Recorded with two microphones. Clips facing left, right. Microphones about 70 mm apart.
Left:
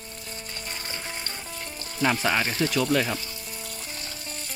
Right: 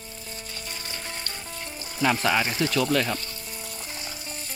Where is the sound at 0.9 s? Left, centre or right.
Centre.